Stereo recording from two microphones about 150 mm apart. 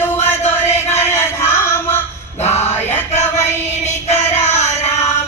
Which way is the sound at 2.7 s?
15° left (ahead or behind).